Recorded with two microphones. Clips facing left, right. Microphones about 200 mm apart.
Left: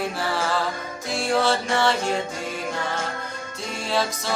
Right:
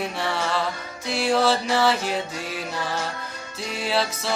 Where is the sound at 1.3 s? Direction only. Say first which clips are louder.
Right 1 dB; centre (ahead or behind).